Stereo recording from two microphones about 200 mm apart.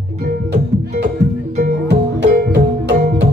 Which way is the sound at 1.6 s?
55° right (ahead or behind).